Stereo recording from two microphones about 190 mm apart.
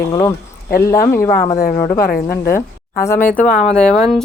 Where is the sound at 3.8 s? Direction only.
5° left (ahead or behind).